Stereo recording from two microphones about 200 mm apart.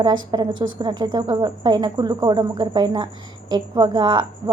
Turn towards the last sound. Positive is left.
turn(degrees=-20)  # may be behind; listen again after turning